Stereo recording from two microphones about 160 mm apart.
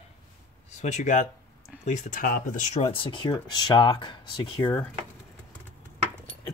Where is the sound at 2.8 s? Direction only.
30° left (ahead or behind).